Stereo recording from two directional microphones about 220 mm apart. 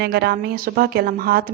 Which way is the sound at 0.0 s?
45° right (ahead or behind).